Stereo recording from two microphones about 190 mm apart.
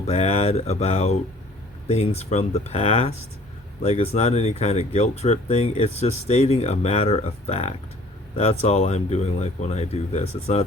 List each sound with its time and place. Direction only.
0.0 s speech: 35° left (ahead or behind)